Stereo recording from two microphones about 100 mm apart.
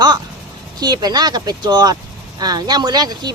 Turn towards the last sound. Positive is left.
turn(degrees=-40)  # may be behind; listen again after turning